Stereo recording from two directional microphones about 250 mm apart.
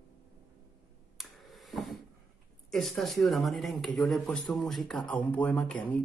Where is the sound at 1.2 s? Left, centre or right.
Centre.